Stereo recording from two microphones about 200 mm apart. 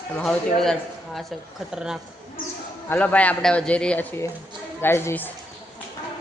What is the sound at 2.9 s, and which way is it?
Speech, 5° left (ahead or behind).